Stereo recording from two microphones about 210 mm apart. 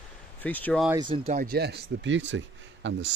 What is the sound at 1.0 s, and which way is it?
Speech, 25° right (ahead or behind).